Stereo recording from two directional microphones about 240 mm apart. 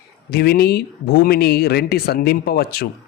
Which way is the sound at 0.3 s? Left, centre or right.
Left.